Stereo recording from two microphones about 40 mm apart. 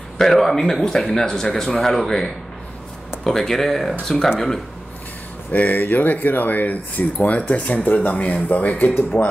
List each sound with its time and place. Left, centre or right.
0.2 s speech: centre
3.3 s speech: centre
5.5 s speech: left
9.1 s speech: left